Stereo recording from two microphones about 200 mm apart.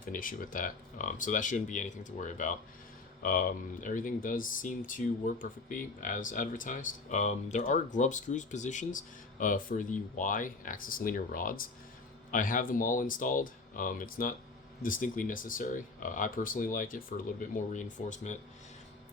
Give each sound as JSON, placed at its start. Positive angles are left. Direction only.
{"t": 0.0, "sound": "speech", "side_deg": 45}